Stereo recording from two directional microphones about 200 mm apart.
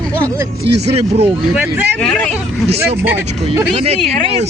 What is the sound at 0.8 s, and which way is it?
Speech, 30° right (ahead or behind).